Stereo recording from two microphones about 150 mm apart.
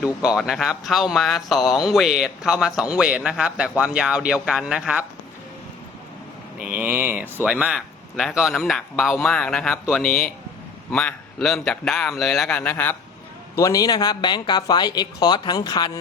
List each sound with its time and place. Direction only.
0.0 s speech: 5° right (ahead or behind)
6.6 s speech: 10° right (ahead or behind); by 13.0 s 10° left (ahead or behind)
13.6 s speech: 25° left (ahead or behind)